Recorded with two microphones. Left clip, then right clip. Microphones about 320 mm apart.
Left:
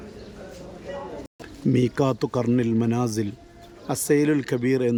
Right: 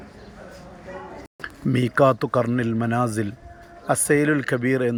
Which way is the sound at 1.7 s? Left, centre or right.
Centre.